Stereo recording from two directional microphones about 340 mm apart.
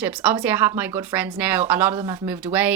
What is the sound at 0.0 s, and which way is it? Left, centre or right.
Speech, centre.